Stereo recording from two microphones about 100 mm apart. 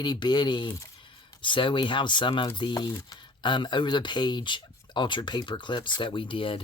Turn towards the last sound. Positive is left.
turn(degrees=60)  # may be behind; listen again after turning